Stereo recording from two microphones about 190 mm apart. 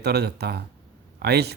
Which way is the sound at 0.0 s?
60° right (ahead or behind).